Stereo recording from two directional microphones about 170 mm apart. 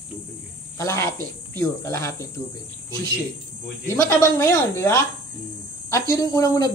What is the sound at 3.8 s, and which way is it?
Speech, 15° left (ahead or behind).